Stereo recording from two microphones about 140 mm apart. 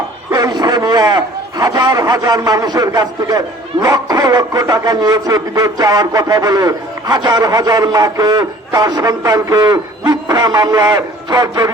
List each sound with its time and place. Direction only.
0.3 s a man's voice: 25° right (ahead or behind)